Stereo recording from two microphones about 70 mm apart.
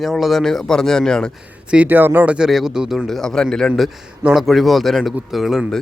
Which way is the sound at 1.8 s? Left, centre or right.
Right.